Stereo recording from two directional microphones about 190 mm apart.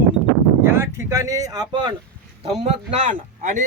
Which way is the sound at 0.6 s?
15° right (ahead or behind).